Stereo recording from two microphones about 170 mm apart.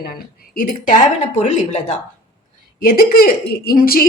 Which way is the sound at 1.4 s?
45° left (ahead or behind).